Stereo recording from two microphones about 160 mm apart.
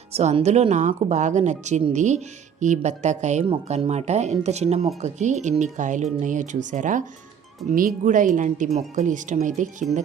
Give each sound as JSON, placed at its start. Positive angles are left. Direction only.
{"t": 0.1, "sound": "speech", "side_deg": -45}
{"t": 3.4, "sound": "speech", "side_deg": -35}